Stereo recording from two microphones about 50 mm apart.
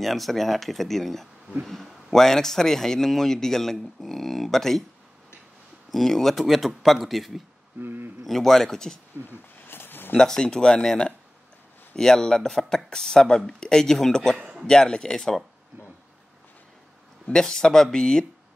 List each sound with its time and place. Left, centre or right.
0.0 s a man's voice: centre
5.9 s a man's voice: centre
7.8 s a sound: right
8.3 s speech: centre
9.2 s a sound: left
10.1 s speech: centre
14.3 s a man's voice: centre
14.7 s speech: centre
17.3 s speech: centre